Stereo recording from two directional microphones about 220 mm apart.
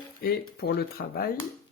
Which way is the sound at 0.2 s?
45° left (ahead or behind).